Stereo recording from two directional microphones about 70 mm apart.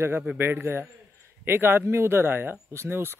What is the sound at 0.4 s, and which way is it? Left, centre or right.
Speech, right.